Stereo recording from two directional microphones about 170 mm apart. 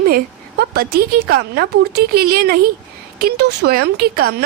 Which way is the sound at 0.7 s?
65° right (ahead or behind).